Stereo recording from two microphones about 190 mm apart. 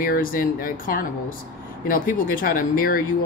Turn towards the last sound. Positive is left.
turn(degrees=50)  # may be behind; listen again after turning